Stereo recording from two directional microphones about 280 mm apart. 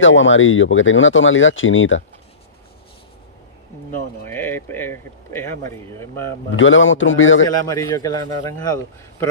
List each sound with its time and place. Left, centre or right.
0.0 s speech: left
4.3 s speech: centre
6.5 s speech: left
7.6 s speech: centre